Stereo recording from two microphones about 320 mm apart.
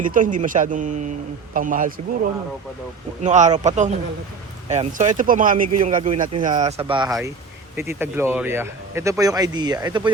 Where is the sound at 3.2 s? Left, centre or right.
Right.